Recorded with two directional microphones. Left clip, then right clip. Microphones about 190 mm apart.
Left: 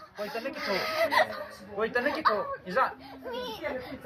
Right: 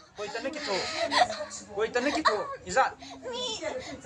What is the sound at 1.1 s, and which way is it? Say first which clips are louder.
Speech: right 3 dB; 5° right (ahead or behind).